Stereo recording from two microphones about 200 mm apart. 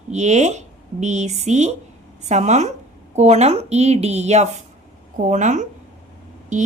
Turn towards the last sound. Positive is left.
turn(degrees=-35)  # may be behind; listen again after turning